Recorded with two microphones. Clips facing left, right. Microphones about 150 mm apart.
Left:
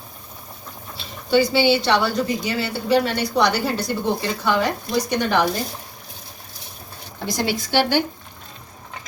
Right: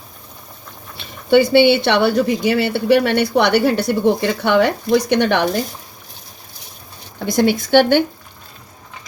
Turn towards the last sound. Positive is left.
turn(degrees=-55)  # may be behind; listen again after turning